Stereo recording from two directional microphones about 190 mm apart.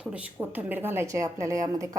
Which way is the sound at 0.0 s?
5° right (ahead or behind).